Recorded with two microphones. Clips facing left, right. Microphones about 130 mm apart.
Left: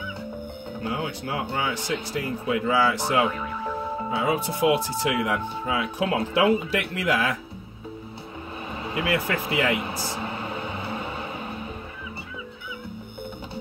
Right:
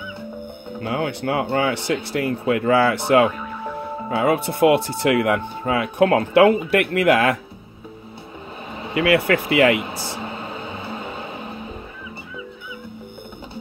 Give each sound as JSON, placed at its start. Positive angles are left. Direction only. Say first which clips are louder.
{"t": 0.8, "sound": "speech", "louder": "right 7 dB", "side_deg": -65}
{"t": 4.1, "sound": "speech", "louder": "right 6 dB", "side_deg": -65}
{"t": 8.9, "sound": "speech", "louder": "right 8 dB", "side_deg": -70}
{"t": 9.8, "sound": "music", "louder": "right 1 dB", "side_deg": -25}